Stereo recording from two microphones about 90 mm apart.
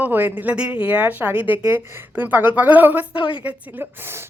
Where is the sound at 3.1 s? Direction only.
70° left (ahead or behind).